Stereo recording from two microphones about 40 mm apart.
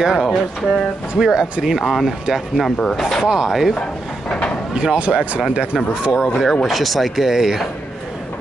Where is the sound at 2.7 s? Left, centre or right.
Centre.